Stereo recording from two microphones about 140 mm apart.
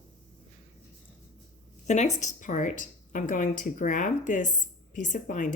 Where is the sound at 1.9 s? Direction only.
55° left (ahead or behind).